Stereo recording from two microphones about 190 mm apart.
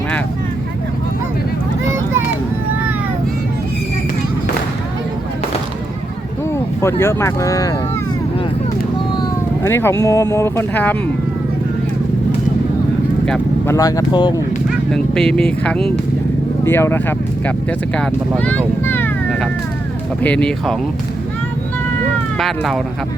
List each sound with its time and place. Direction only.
6.8 s speech: 15° left (ahead or behind)
9.6 s speech: 15° left (ahead or behind)
13.7 s speech: 20° left (ahead or behind)
14.9 s speech: 5° left (ahead or behind)
20.2 s speech: 5° left (ahead or behind)
22.4 s speech: centre (ahead or behind)